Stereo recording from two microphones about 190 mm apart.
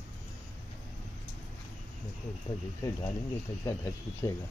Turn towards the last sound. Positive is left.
turn(degrees=15)  # may be behind; listen again after turning